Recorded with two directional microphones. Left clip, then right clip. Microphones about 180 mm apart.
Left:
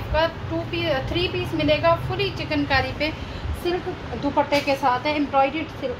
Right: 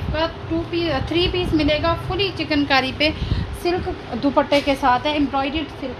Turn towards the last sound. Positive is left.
turn(degrees=-35)  # may be behind; listen again after turning